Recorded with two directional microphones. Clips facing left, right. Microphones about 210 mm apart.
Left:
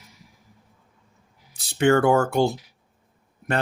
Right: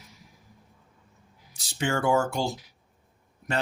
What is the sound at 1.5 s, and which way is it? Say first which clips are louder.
Speech: left 10 dB; 60° left (ahead or behind).